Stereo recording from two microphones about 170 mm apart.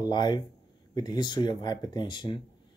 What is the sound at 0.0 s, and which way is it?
Speech, 25° left (ahead or behind).